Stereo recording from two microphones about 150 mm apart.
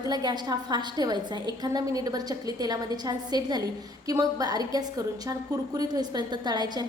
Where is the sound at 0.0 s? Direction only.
25° right (ahead or behind).